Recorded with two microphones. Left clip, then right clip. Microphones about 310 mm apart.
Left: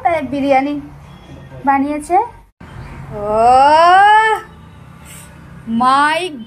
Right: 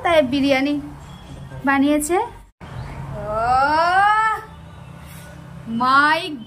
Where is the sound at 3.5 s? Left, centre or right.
Centre.